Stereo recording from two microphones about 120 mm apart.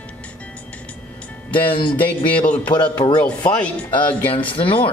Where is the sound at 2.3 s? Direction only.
10° left (ahead or behind).